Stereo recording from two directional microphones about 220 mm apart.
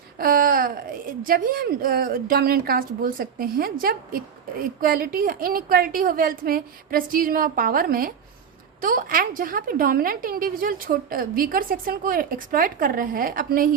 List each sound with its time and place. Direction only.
0.2 s a woman's voice: 40° right (ahead or behind)